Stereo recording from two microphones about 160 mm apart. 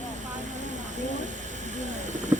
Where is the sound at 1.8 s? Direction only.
50° right (ahead or behind).